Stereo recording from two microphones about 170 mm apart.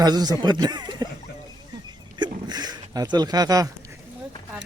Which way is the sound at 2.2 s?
25° right (ahead or behind).